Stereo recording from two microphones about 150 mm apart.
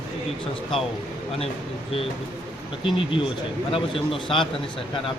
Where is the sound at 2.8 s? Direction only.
35° left (ahead or behind).